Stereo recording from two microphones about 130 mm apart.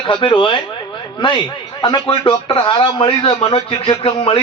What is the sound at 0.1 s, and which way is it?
A man's voice, 40° left (ahead or behind).